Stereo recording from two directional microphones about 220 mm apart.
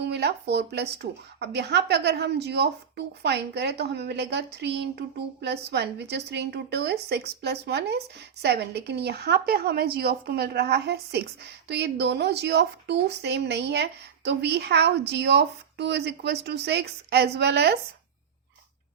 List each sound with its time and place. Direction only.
0.0 s speech: 50° right (ahead or behind)